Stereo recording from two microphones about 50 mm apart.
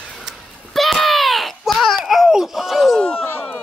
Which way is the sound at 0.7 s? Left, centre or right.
Centre.